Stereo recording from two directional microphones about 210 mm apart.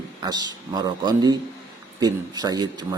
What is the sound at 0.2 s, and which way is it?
Speech, 20° right (ahead or behind).